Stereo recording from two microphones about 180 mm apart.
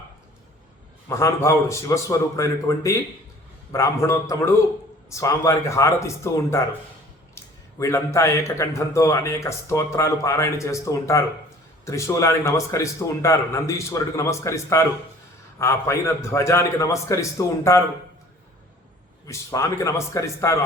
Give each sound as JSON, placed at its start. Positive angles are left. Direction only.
{"t": 1.0, "sound": "a man's voice", "side_deg": 15}
{"t": 19.3, "sound": "a man's voice", "side_deg": 15}